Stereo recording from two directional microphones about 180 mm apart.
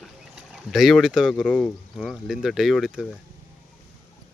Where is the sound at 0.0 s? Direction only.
Centre (ahead or behind).